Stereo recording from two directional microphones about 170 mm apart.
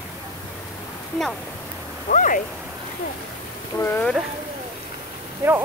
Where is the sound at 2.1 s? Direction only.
50° left (ahead or behind).